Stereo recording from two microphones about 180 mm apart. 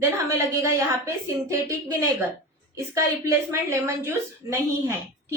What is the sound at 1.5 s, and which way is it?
Speech, 15° right (ahead or behind).